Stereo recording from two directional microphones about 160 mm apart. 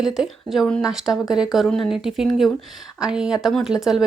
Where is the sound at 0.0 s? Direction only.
Centre (ahead or behind).